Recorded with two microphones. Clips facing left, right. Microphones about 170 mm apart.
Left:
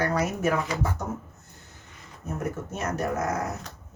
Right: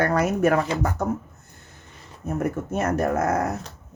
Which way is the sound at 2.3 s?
55° right (ahead or behind).